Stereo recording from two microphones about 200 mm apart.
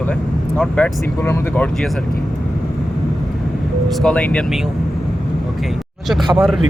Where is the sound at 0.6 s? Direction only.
5° left (ahead or behind).